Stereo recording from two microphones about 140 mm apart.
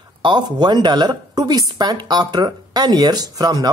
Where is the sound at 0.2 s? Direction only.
30° right (ahead or behind).